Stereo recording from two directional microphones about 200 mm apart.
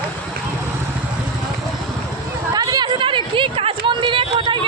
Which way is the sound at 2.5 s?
20° right (ahead or behind).